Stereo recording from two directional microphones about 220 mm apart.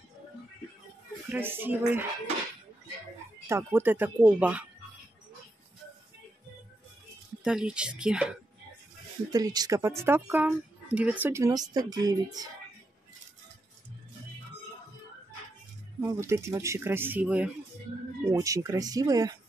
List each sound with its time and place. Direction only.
1.3 s speech: 10° right (ahead or behind)
3.4 s speech: 10° right (ahead or behind)
7.4 s speech: 5° right (ahead or behind)
9.3 s speech: 15° right (ahead or behind)
16.0 s speech: 10° right (ahead or behind)